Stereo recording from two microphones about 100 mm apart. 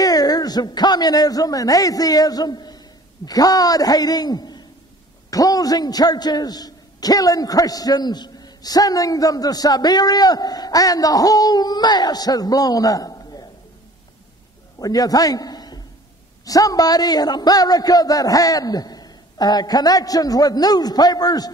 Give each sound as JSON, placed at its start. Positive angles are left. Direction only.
{"t": 0.0, "sound": "a man's voice", "side_deg": 40}
{"t": 14.8, "sound": "a man's voice", "side_deg": 40}